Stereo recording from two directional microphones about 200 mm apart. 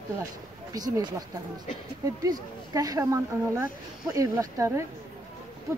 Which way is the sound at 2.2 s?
20° right (ahead or behind).